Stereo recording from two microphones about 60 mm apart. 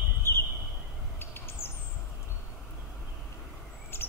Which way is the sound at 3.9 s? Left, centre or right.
Left.